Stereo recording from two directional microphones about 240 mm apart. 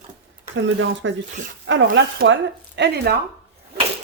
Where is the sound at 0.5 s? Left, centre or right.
Right.